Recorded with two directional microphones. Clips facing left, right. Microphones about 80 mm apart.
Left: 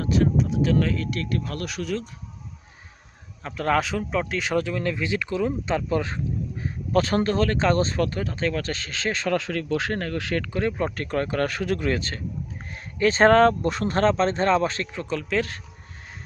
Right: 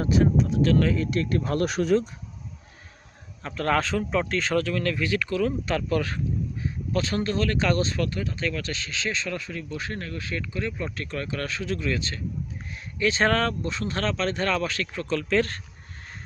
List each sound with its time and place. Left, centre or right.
0.0 s speech: centre
0.3 s speech: centre
0.9 s speech: right
3.4 s speech: centre; by 6.2 s left
6.6 s speech: left
9.4 s speech: left
9.9 s speech: left
10.2 s speech: left
13.7 s speech: left
14.9 s speech: centre